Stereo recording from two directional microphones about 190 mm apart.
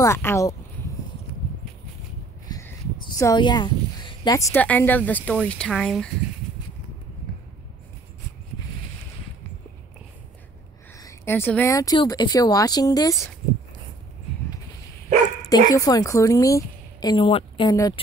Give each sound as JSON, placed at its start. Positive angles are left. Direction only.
{"t": 0.0, "sound": "speech", "side_deg": 15}
{"t": 2.5, "sound": "a sound", "side_deg": 20}
{"t": 4.2, "sound": "speech", "side_deg": 20}
{"t": 11.0, "sound": "speech", "side_deg": 15}
{"t": 15.5, "sound": "a woman's voice", "side_deg": 20}